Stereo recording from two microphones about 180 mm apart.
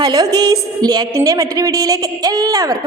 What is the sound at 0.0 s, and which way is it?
A woman's voice, 20° right (ahead or behind).